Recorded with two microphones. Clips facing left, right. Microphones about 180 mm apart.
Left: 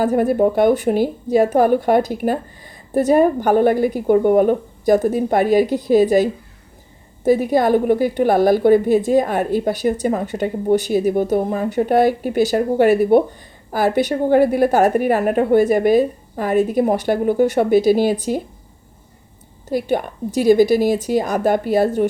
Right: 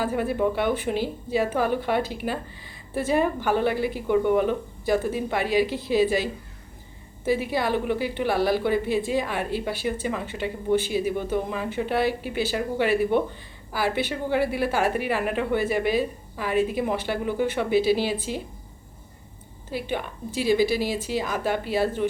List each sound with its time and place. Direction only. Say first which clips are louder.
0.0 s a woman's voice: left 8 dB; 45° left (ahead or behind)
19.7 s a woman's voice: left 9 dB; 45° left (ahead or behind)